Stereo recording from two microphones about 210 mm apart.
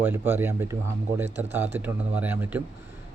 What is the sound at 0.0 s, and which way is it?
Speech, 10° right (ahead or behind).